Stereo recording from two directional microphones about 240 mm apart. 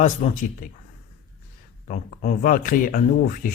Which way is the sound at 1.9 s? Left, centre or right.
Left.